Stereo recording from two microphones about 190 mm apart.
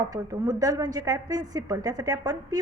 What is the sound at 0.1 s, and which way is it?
A woman's voice, 20° right (ahead or behind).